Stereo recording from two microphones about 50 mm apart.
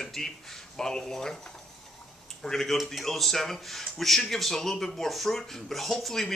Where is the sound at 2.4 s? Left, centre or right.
Centre.